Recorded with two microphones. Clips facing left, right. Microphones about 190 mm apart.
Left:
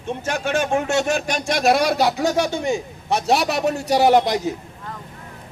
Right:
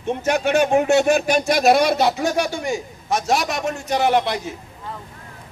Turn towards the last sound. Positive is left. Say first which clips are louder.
# left 3 dB
turn(degrees=40)  # may be behind; listen again after turning